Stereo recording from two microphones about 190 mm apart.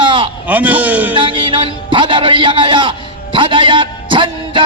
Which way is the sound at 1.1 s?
25° right (ahead or behind).